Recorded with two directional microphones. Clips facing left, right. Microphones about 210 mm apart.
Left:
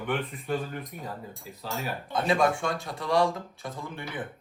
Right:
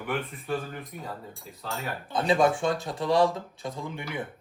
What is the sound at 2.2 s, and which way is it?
Speech, 25° right (ahead or behind).